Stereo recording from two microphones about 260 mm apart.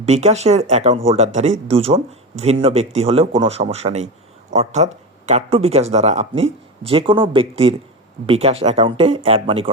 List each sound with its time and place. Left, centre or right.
0.0 s speech: right